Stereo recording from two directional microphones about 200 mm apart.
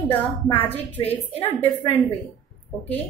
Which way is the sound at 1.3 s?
10° left (ahead or behind).